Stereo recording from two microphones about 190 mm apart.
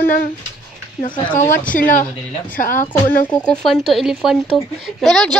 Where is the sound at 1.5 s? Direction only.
45° left (ahead or behind).